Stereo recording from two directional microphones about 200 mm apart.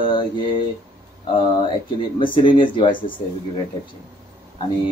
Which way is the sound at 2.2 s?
25° left (ahead or behind).